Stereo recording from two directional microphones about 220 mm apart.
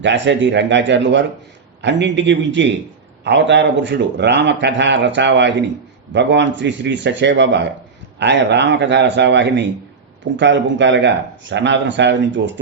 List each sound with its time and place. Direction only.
0.0 s a man's voice: 55° right (ahead or behind)